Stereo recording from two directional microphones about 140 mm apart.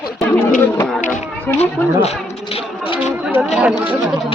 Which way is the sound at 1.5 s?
50° left (ahead or behind).